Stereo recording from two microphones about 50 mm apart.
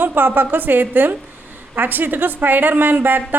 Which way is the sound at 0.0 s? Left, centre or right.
Right.